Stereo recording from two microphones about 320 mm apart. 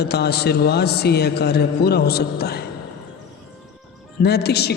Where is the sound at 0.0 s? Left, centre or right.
Left.